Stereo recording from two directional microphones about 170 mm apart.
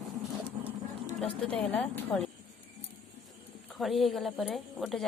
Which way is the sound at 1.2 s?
5° left (ahead or behind).